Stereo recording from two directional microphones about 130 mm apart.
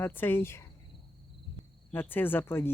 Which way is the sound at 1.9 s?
15° left (ahead or behind).